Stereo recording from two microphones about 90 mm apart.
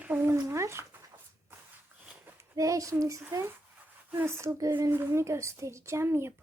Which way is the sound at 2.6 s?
35° right (ahead or behind).